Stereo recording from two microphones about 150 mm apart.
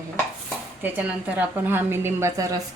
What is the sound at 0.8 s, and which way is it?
A woman's voice, 10° right (ahead or behind).